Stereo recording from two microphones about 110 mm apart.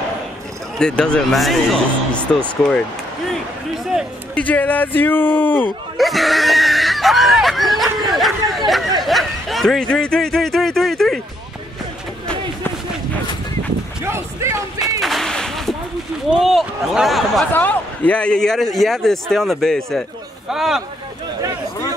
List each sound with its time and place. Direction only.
0.7 s a man's voice: 5° left (ahead or behind)
4.4 s speech: 15° left (ahead or behind)
5.9 s a sound: centre (ahead or behind)
9.0 s speech: centre (ahead or behind)
14.0 s a sound: 25° right (ahead or behind)
15.0 s whip: centre (ahead or behind)
16.3 s a man's voice: 5° right (ahead or behind)
17.5 s a man's voice: 15° left (ahead or behind); by 20.8 s 5° right (ahead or behind)